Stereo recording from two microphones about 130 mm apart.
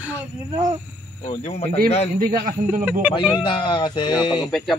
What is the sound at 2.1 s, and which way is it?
Speech, 90° right.